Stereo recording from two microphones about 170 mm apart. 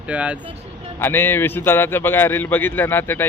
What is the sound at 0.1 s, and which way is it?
Speech, 5° right (ahead or behind).